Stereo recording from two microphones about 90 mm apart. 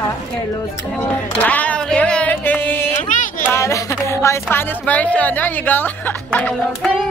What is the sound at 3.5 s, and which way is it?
Music, 35° left (ahead or behind).